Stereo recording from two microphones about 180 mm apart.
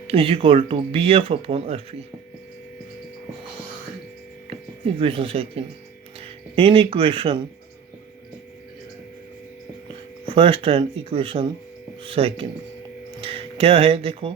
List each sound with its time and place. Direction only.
0.1 s speech: 30° right (ahead or behind)
4.9 s speech: 30° right (ahead or behind)
9.9 s speech: 30° right (ahead or behind)